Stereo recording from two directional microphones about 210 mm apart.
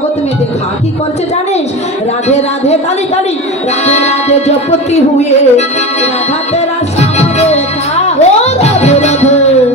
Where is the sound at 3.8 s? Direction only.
30° left (ahead or behind).